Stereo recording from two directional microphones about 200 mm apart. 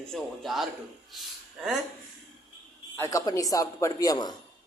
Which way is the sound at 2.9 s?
15° left (ahead or behind).